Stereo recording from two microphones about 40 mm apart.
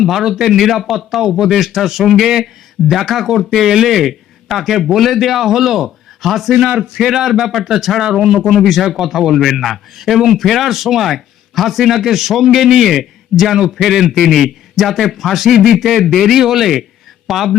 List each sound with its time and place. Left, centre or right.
0.0 s a man's voice: centre
6.7 s a man's voice: right
7.1 s a man's voice: centre
15.9 s a man's voice: centre